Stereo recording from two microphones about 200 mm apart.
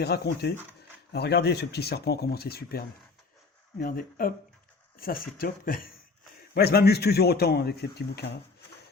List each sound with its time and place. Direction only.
0.0 s a man's voice: 55° left (ahead or behind)